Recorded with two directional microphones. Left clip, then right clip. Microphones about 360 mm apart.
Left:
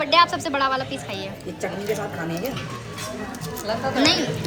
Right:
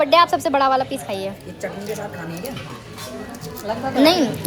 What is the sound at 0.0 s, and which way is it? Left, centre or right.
A woman's voice, centre.